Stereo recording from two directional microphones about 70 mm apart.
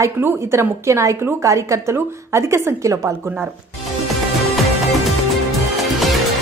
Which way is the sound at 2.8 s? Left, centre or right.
Right.